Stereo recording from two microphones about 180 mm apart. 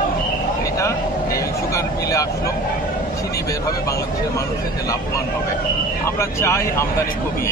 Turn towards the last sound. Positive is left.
turn(degrees=15)  # may be behind; listen again after turning